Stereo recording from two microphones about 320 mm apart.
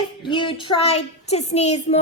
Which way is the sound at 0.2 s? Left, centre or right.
Centre.